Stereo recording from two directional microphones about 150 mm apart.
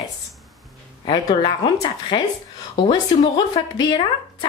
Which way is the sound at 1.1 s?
30° left (ahead or behind).